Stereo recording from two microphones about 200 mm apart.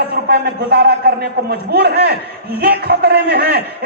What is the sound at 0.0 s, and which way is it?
A man's voice, 55° right (ahead or behind).